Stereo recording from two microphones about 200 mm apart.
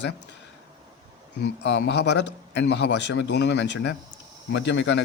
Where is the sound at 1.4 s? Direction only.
60° left (ahead or behind).